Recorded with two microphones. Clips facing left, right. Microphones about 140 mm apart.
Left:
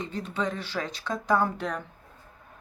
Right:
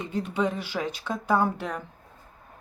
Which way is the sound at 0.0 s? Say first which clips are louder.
Right 4 dB; 10° right (ahead or behind).